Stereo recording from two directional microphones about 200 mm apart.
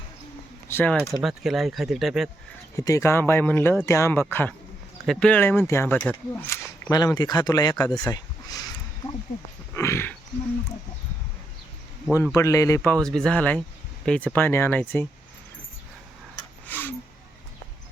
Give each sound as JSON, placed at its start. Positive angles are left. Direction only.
{"t": 0.7, "sound": "speech", "side_deg": 10}
{"t": 1.2, "sound": "speech", "side_deg": 0}
{"t": 2.7, "sound": "speech", "side_deg": 15}
{"t": 6.9, "sound": "speech", "side_deg": 20}
{"t": 9.7, "sound": "speech", "side_deg": 15}
{"t": 12.1, "sound": "speech", "side_deg": 15}
{"t": 16.6, "sound": "a sound", "side_deg": 10}